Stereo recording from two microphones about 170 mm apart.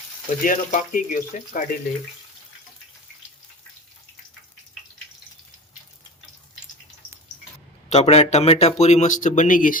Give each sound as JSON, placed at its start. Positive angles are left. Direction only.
{"t": 0.4, "sound": "speech", "side_deg": 50}
{"t": 7.9, "sound": "speech", "side_deg": 40}